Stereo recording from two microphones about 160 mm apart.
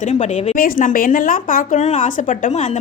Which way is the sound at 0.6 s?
60° left (ahead or behind).